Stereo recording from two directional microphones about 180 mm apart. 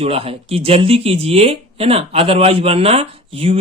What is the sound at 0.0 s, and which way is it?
Speech, 35° right (ahead or behind).